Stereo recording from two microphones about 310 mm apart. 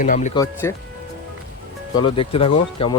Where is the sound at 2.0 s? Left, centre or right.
Centre.